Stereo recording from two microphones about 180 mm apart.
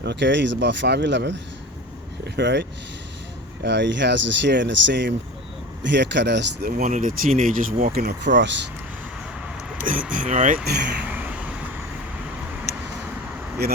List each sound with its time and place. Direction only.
0.0 s speech: 70° right (ahead or behind)
9.8 s speech: 50° right (ahead or behind)
11.1 s a sound: 10° right (ahead or behind)
13.6 s speech: 60° right (ahead or behind)